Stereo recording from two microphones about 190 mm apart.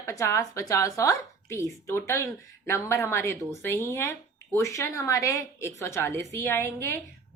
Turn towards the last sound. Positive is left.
turn(degrees=15)  # may be behind; listen again after turning